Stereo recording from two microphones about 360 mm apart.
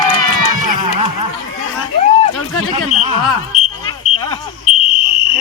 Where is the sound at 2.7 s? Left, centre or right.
Centre.